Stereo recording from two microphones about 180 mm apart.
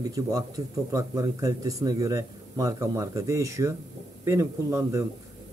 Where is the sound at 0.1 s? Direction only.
20° right (ahead or behind).